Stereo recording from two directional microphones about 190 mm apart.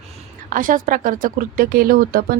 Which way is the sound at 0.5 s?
45° right (ahead or behind).